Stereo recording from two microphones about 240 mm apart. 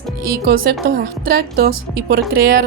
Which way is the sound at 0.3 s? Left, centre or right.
Right.